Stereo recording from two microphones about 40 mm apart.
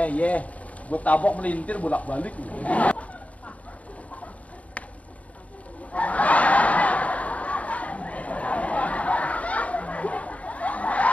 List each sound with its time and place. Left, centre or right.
0.0 s a man's voice: left
4.8 s a sound: left
5.9 s snicker: left